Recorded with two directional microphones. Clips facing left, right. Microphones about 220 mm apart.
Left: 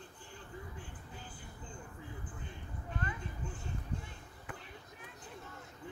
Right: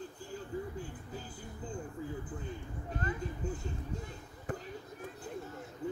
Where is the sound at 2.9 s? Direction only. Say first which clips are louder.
Right 5 dB; 40° right (ahead or behind).